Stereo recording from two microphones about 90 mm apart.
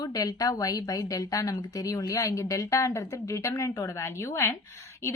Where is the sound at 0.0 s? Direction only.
45° left (ahead or behind).